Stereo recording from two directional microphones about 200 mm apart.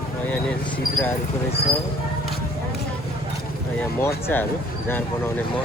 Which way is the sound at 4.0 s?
10° left (ahead or behind).